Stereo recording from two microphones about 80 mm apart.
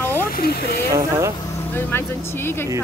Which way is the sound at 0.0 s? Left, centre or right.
Left.